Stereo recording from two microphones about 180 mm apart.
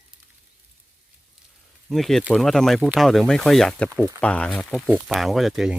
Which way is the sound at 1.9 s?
Centre (ahead or behind).